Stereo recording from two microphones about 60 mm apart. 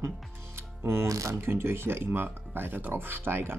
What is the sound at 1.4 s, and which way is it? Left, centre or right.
Speech, right.